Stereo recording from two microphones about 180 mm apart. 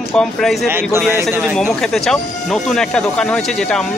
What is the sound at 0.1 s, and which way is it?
Speech, centre (ahead or behind).